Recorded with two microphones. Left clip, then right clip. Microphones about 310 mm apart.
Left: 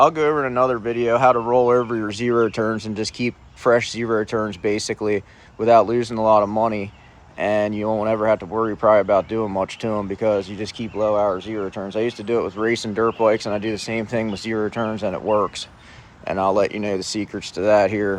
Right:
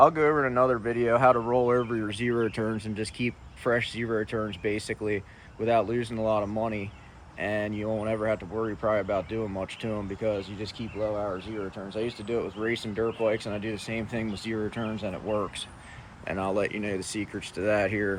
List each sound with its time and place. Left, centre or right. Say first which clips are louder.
0.0 s speech: left 4 dB; centre